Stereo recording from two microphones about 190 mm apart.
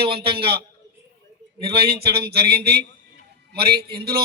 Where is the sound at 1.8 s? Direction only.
55° right (ahead or behind).